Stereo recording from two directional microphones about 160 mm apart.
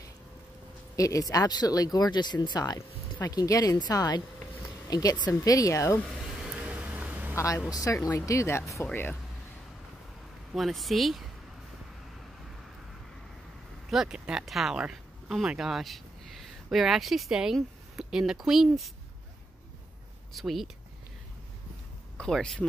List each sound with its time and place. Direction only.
0.9 s speech: 20° left (ahead or behind)
6.4 s a sound: 5° right (ahead or behind)
7.3 s speech: 20° left (ahead or behind)
10.5 s speech: centre (ahead or behind)
13.8 s speech: 5° right (ahead or behind)
20.3 s speech: centre (ahead or behind)
22.1 s speech: 5° left (ahead or behind)